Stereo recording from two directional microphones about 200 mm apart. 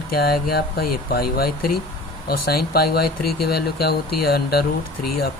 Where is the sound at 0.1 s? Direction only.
50° left (ahead or behind).